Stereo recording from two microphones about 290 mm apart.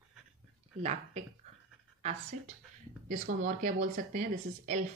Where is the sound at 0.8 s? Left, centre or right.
Right.